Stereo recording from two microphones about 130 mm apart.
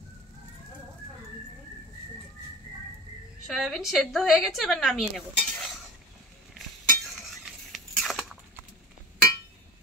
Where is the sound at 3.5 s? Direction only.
Centre (ahead or behind).